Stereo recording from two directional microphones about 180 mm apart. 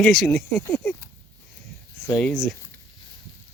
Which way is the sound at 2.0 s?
5° left (ahead or behind).